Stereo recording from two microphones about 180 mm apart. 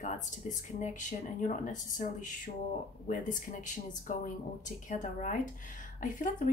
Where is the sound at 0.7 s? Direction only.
40° left (ahead or behind).